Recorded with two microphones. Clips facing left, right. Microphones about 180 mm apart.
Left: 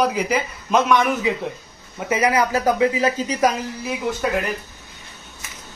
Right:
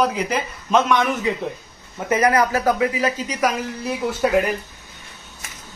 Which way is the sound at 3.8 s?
Centre (ahead or behind).